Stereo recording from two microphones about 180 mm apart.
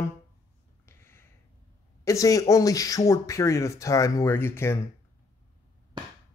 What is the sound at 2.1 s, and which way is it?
Speech, 20° left (ahead or behind).